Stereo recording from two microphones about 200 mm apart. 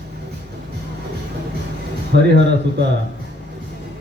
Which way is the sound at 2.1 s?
60° right (ahead or behind).